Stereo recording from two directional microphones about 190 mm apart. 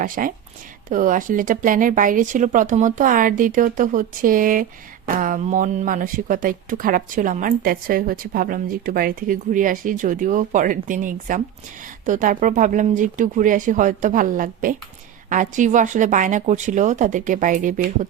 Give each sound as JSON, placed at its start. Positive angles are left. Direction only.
{"t": 0.0, "sound": "speech", "side_deg": -45}